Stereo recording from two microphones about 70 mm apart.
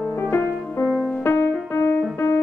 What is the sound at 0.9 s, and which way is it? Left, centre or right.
Music, centre.